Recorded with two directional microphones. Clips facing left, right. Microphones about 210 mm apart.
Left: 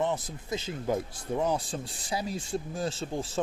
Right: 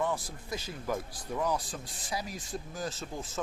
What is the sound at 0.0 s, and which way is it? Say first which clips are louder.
Speech: left 3 dB; 20° left (ahead or behind).